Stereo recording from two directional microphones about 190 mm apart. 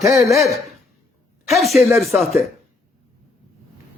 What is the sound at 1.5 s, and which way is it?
Speech, centre (ahead or behind).